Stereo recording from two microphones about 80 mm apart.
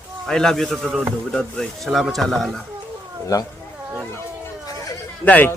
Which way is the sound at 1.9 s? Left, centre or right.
Centre.